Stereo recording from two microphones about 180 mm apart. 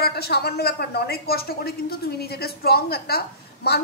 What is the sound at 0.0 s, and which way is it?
Speech, 60° left (ahead or behind).